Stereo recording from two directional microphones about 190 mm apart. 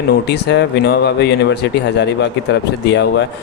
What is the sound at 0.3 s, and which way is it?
Speech, 60° left (ahead or behind).